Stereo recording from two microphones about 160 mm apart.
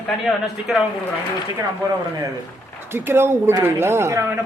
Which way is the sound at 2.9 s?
15° right (ahead or behind).